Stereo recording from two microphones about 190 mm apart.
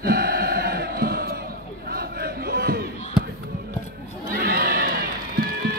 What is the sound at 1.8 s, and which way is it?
Battle cry, 55° right (ahead or behind).